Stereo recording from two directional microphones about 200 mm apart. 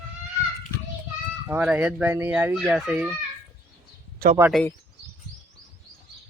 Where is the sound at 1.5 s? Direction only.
5° right (ahead or behind).